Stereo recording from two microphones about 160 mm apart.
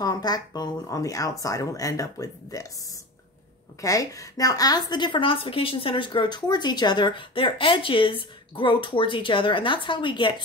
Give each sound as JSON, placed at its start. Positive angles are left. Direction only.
{"t": 0.0, "sound": "speech", "side_deg": 25}
{"t": 3.8, "sound": "a woman's voice", "side_deg": 20}